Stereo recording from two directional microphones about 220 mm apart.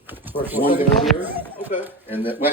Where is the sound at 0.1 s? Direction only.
10° right (ahead or behind).